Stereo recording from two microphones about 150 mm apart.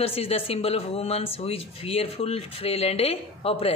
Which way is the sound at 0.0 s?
40° left (ahead or behind).